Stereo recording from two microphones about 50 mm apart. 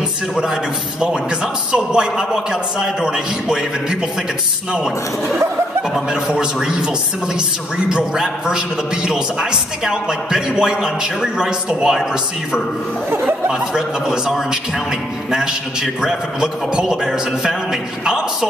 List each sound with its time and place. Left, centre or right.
1.7 s a man's voice: centre
6.2 s a man's voice: centre
13.5 s a man's voice: centre
15.3 s a man's voice: centre